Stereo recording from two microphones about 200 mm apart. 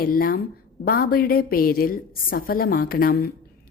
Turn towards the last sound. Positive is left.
turn(degrees=50)  # may be behind; listen again after turning